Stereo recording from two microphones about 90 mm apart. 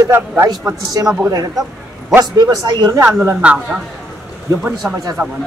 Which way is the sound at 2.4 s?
50° right (ahead or behind).